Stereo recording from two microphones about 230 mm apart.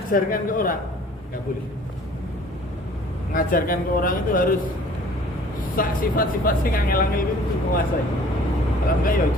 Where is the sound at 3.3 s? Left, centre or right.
Left.